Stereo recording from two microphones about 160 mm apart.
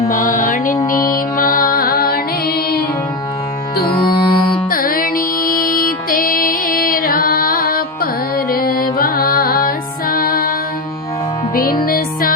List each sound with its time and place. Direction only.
0.1 s mantra: 55° left (ahead or behind)
0.9 s music: 60° left (ahead or behind)
4.0 s music: 30° left (ahead or behind)
4.7 s music: 65° left (ahead or behind)
11.5 s music: 65° left (ahead or behind)